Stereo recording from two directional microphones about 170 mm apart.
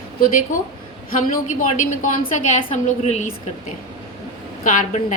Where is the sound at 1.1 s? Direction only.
55° left (ahead or behind).